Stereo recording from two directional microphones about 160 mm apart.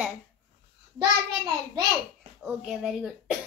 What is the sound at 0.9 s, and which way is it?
Speech, 25° right (ahead or behind).